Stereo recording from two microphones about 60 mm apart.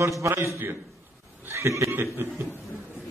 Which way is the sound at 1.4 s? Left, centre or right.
Right.